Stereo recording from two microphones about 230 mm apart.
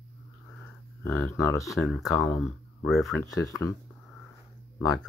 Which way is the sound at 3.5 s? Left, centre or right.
Centre.